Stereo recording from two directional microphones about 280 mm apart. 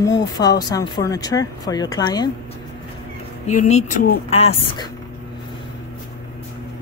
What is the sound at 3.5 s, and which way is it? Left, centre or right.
Speech, left.